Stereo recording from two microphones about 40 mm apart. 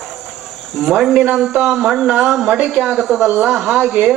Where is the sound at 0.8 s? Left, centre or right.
Centre.